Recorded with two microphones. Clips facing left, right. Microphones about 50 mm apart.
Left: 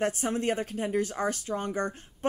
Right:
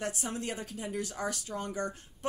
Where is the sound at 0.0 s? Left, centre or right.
Left.